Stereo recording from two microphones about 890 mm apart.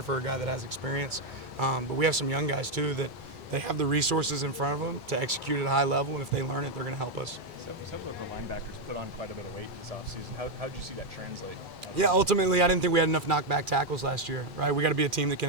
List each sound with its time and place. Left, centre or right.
0.1 s speech: right
3.5 s speech: right
11.9 s speech: right